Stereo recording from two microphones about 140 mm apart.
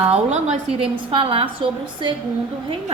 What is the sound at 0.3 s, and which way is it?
Speech, 5° right (ahead or behind).